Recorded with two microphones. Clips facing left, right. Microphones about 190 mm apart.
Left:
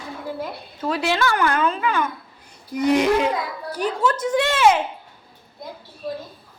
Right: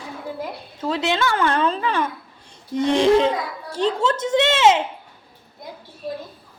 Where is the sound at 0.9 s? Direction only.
20° right (ahead or behind).